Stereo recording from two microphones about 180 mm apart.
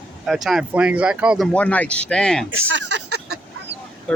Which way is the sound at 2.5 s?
85° right.